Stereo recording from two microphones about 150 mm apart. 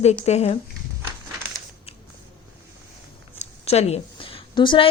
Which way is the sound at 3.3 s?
45° left (ahead or behind).